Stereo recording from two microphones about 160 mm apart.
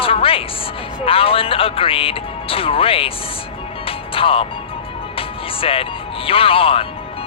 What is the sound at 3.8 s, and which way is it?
Music, 35° left (ahead or behind).